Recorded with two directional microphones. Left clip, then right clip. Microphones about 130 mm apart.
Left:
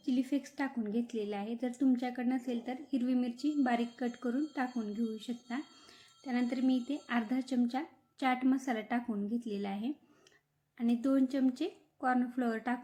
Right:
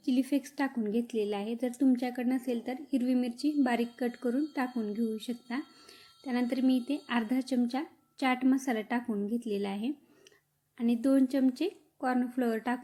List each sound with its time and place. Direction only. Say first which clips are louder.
0.0 s a woman's voice: right 4 dB; 25° right (ahead or behind)